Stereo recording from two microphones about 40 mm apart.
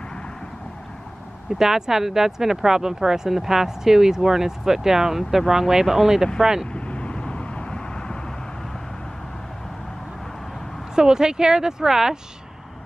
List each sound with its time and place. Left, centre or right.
1.6 s speech: centre
6.7 s vehicle: left
11.0 s speech: centre